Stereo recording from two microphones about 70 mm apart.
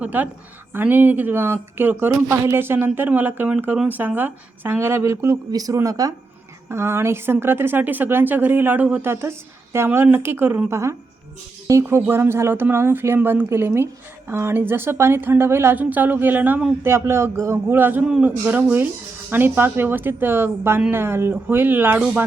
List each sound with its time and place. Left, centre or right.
0.0 s a woman's voice: right
5.5 s speech: right
6.7 s a woman's voice: right
15.8 s speech: right
16.8 s a woman's voice: right